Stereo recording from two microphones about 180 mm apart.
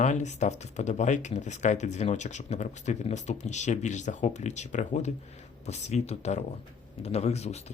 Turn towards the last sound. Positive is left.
turn(degrees=35)  # may be behind; listen again after turning